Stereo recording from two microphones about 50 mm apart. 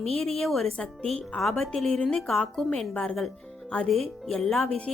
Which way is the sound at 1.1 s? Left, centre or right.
Centre.